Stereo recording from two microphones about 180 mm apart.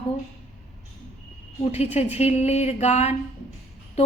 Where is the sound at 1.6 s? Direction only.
35° left (ahead or behind).